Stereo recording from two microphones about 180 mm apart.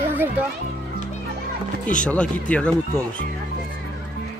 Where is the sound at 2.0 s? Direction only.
5° left (ahead or behind).